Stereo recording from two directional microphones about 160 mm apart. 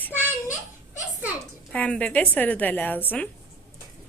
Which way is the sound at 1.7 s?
5° left (ahead or behind).